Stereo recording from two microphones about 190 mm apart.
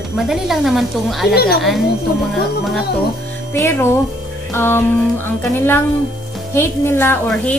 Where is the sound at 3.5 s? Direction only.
10° left (ahead or behind).